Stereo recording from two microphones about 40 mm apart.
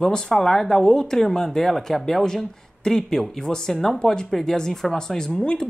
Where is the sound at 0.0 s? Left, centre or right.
Centre.